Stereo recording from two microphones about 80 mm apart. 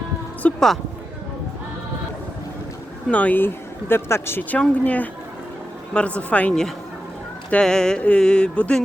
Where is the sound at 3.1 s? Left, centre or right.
Centre.